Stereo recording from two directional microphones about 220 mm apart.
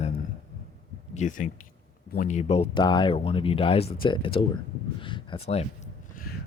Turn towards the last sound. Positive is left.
turn(degrees=30)  # may be behind; listen again after turning